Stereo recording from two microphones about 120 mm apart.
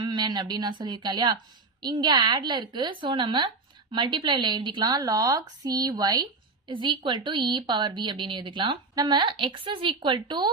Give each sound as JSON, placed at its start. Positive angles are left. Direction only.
{"t": 0.0, "sound": "speech", "side_deg": -40}